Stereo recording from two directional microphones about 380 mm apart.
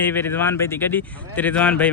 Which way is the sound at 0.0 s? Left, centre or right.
Centre.